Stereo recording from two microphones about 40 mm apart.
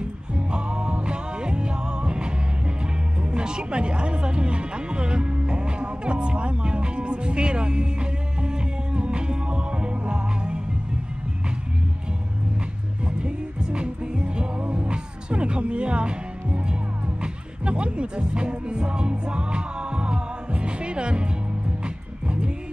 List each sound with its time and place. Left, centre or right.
0.5 s music: right
13.2 s music: right